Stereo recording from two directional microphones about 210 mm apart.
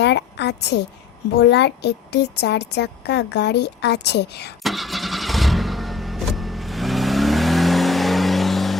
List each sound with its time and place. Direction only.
0.0 s a sound: 55° left (ahead or behind)
1.4 s a woman's voice: 55° left (ahead or behind)
4.6 s vehicle: centre (ahead or behind)